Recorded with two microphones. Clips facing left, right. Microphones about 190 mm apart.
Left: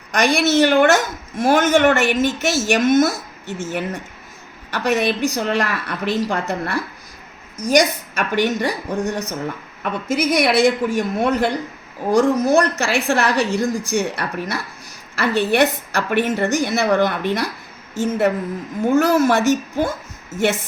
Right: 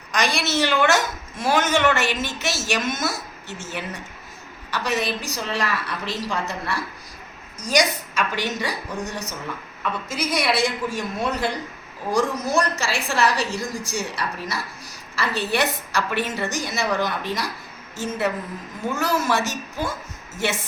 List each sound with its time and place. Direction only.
0.1 s a woman's voice: 55° left (ahead or behind)